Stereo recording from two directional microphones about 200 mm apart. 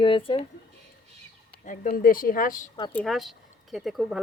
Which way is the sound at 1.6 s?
40° left (ahead or behind).